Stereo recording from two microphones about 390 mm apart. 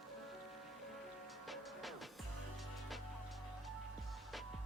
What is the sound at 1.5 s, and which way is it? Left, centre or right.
Music, centre.